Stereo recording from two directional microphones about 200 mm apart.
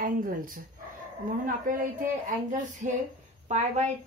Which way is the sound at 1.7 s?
45° right (ahead or behind).